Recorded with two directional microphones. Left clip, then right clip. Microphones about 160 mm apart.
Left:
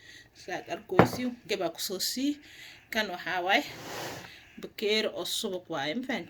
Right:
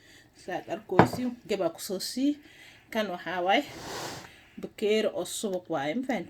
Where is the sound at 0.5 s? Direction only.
40° right (ahead or behind).